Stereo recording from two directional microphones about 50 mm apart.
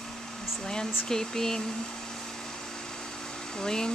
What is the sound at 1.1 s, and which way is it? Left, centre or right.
Speech, centre.